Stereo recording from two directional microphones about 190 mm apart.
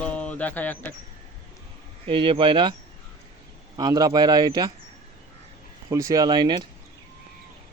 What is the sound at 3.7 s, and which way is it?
Speech, 20° right (ahead or behind).